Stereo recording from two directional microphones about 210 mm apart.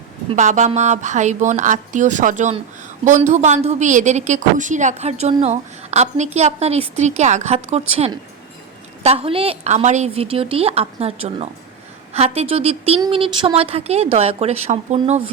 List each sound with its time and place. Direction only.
0.3 s a woman's voice: 35° right (ahead or behind)